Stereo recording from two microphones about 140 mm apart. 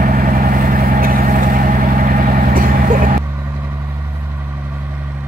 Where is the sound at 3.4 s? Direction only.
20° right (ahead or behind).